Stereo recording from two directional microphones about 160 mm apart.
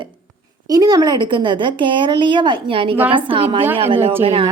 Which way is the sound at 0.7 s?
25° right (ahead or behind).